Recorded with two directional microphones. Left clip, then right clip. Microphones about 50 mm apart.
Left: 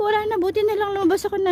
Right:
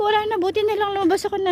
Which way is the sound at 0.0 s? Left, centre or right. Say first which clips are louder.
Right 1 dB; left.